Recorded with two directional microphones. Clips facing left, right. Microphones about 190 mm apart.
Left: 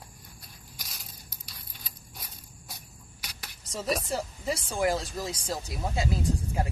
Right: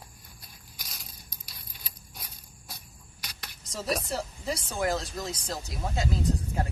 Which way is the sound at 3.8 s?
Centre (ahead or behind).